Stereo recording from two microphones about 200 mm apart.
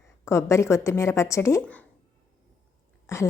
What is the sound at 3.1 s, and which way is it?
Speech, 15° left (ahead or behind).